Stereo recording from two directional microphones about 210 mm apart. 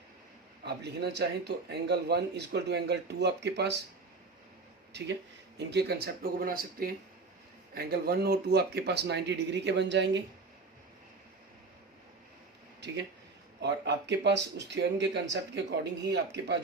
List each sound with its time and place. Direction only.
0.6 s a man's voice: 50° right (ahead or behind)
4.9 s a man's voice: 55° right (ahead or behind)
13.6 s a man's voice: 55° right (ahead or behind)